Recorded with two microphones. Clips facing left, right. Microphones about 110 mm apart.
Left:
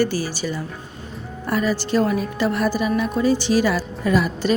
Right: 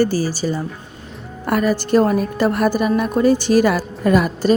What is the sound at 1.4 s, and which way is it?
A woman's voice, 55° right (ahead or behind).